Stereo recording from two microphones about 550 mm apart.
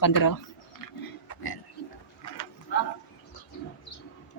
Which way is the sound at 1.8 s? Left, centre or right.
Left.